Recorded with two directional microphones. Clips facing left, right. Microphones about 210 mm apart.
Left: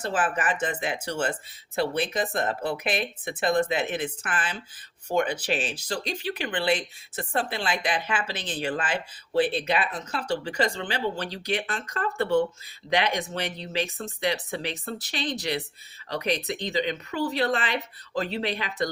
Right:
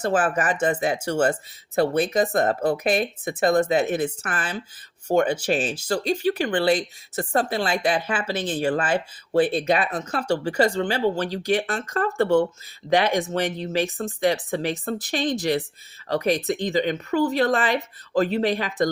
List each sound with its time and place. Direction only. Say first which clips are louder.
0.0 s speech: right 5 dB; 45° right (ahead or behind)